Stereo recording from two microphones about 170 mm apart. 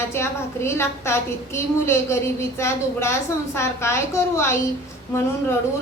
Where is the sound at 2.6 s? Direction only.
15° left (ahead or behind).